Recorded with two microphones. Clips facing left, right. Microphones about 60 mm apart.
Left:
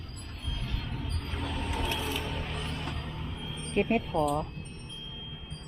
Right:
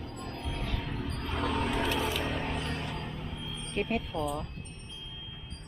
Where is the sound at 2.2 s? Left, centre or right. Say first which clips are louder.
Right 3 dB; right.